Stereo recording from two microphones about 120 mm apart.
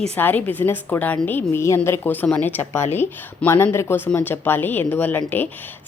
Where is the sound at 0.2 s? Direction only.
15° left (ahead or behind).